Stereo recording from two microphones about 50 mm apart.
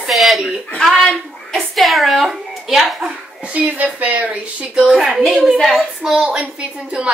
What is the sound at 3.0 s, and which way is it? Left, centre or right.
Speech, right.